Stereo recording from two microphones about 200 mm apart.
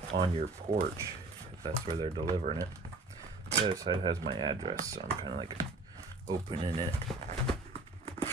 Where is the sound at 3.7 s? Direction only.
25° right (ahead or behind).